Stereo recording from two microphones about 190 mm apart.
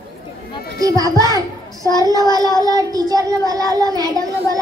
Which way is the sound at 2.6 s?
20° right (ahead or behind).